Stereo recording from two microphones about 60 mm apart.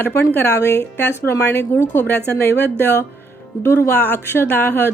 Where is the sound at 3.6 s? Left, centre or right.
Left.